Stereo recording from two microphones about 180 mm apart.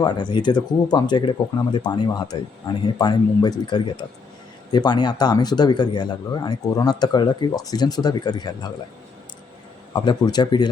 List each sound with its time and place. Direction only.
0.0 s speech: 25° left (ahead or behind)
9.9 s speech: 25° left (ahead or behind)